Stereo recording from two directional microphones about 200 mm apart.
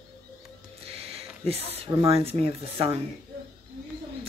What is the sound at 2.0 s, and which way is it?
Speech, 30° right (ahead or behind).